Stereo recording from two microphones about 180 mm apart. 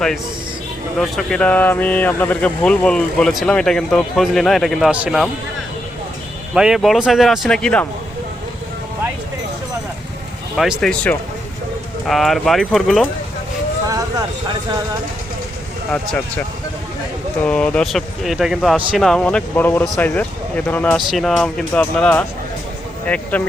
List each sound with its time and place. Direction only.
0.9 s speech: 5° left (ahead or behind)
6.5 s speech: 5° right (ahead or behind)
10.6 s speech: centre (ahead or behind)
13.8 s vehicle: 20° right (ahead or behind)
15.9 s speech: 5° left (ahead or behind)
17.4 s speech: 5° left (ahead or behind)